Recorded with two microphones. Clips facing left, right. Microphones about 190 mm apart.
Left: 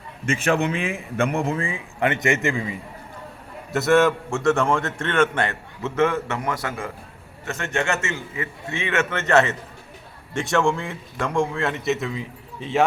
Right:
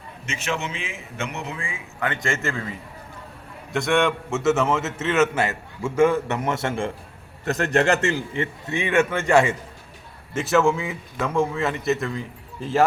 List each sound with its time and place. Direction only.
0.3 s a man's voice: 55° left (ahead or behind)
2.0 s a man's voice: 20° left (ahead or behind)
3.7 s a man's voice: 5° left (ahead or behind); by 6.9 s 25° right (ahead or behind)
7.4 s a man's voice: 35° right (ahead or behind)
8.4 s a man's voice: 20° right (ahead or behind); by 12.8 s centre (ahead or behind)